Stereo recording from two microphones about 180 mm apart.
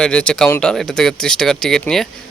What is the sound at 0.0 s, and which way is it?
Speech, 5° left (ahead or behind).